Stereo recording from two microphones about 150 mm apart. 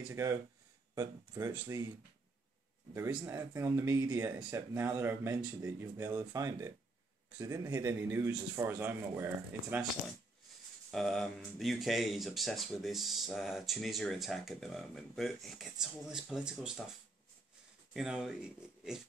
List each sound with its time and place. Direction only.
0.1 s speech: 20° right (ahead or behind)
3.3 s a man's voice: 20° right (ahead or behind)
10.9 s speech: 5° left (ahead or behind)
17.9 s speech: 5° right (ahead or behind)